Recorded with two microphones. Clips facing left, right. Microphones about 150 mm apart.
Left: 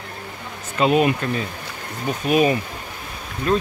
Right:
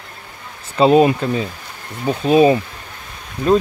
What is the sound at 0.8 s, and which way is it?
Speech, 30° right (ahead or behind).